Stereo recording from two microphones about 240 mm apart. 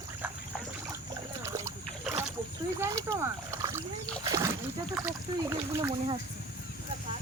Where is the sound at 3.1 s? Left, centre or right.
Centre.